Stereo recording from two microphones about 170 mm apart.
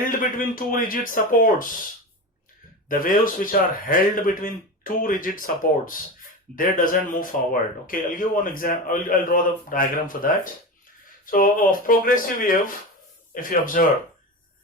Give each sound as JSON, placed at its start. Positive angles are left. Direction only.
{"t": 0.0, "sound": "a man's voice", "side_deg": 55}
{"t": 2.9, "sound": "a man's voice", "side_deg": 55}